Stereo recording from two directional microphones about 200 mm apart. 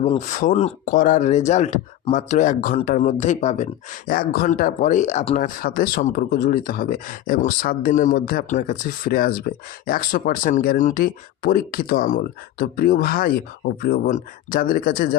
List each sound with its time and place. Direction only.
0.0 s speech: 35° left (ahead or behind)
5.6 s speech: 45° left (ahead or behind)